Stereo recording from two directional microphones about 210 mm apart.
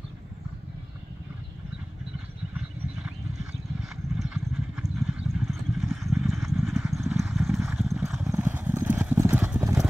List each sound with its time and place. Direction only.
3.9 s vehicle: 5° right (ahead or behind)
7.6 s clip-clop: 5° right (ahead or behind)